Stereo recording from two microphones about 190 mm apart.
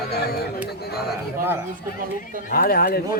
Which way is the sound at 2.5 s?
50° left (ahead or behind).